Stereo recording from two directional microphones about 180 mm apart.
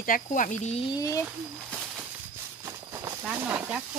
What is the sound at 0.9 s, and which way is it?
Speech, 20° left (ahead or behind).